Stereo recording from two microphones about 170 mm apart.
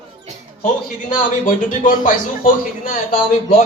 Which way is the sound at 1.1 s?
50° left (ahead or behind).